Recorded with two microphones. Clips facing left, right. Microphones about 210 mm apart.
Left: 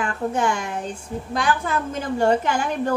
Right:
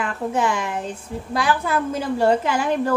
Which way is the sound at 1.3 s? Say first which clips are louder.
Right 2 dB; 10° right (ahead or behind).